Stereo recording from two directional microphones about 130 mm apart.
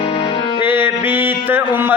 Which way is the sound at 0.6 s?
15° right (ahead or behind).